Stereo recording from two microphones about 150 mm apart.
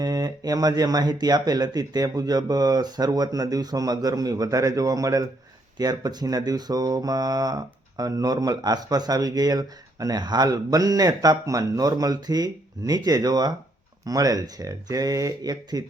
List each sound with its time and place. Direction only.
0.0 s speech: 25° right (ahead or behind)